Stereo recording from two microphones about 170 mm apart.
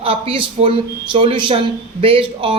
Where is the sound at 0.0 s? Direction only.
30° right (ahead or behind).